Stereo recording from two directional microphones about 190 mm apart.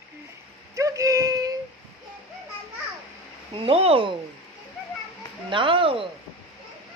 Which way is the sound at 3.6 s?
30° right (ahead or behind).